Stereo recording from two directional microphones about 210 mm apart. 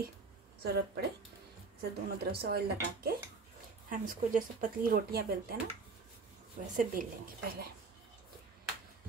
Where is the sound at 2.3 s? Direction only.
50° right (ahead or behind).